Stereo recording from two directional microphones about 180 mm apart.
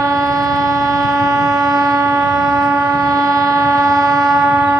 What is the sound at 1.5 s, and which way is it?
Civil defense siren, 20° right (ahead or behind).